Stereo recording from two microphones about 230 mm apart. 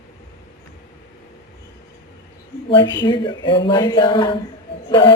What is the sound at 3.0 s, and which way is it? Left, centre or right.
Speech, centre.